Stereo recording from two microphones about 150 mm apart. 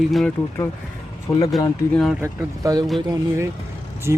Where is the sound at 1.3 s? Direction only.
25° left (ahead or behind).